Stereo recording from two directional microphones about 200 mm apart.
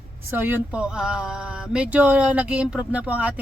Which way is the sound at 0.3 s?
10° right (ahead or behind).